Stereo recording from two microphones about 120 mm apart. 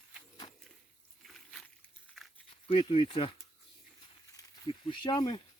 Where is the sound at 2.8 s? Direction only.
45° left (ahead or behind).